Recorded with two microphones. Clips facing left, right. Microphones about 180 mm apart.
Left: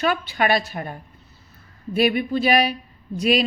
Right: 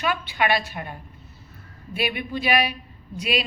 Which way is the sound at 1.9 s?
40° left (ahead or behind).